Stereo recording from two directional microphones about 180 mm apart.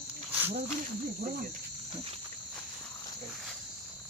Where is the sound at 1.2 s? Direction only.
50° right (ahead or behind).